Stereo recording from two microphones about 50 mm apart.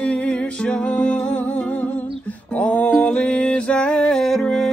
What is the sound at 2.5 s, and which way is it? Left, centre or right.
Music, left.